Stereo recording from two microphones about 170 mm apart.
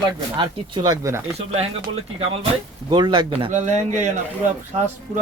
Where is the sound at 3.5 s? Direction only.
45° right (ahead or behind).